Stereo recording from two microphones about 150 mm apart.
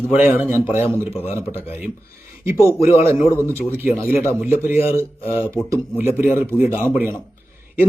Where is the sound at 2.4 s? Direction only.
20° right (ahead or behind).